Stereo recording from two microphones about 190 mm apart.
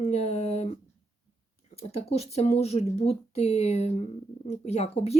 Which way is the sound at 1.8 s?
30° left (ahead or behind).